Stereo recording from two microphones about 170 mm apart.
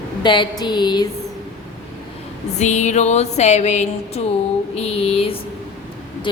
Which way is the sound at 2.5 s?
45° left (ahead or behind).